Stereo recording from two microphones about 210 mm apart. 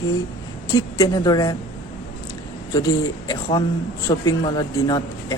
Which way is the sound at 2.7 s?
15° left (ahead or behind).